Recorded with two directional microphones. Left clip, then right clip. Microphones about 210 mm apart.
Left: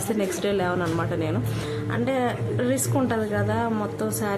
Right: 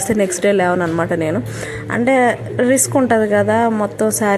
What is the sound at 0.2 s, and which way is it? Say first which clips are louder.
A woman's voice: right 11 dB; 25° right (ahead or behind).